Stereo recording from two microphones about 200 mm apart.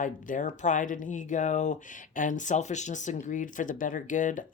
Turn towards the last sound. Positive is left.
turn(degrees=40)  # may be behind; listen again after turning